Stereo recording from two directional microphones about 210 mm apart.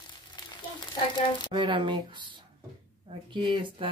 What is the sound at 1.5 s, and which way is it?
Speech, 25° right (ahead or behind).